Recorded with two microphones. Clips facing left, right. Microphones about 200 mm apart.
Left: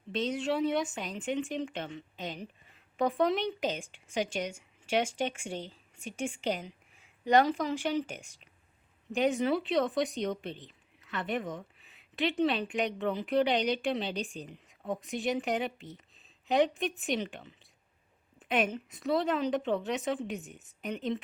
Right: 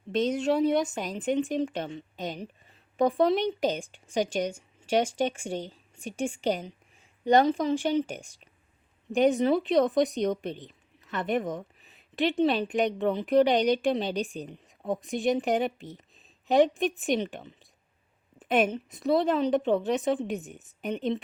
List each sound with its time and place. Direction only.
0.1 s speech: 45° right (ahead or behind)